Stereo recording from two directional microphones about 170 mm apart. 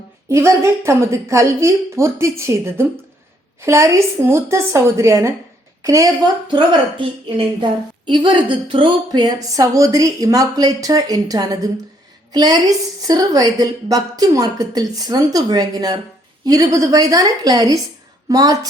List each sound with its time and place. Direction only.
0.3 s a woman's voice: 15° right (ahead or behind)